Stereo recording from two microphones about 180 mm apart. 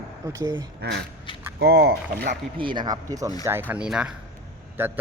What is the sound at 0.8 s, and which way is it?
Speech, 65° right (ahead or behind).